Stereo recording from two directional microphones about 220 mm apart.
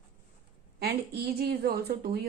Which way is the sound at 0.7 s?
45° right (ahead or behind).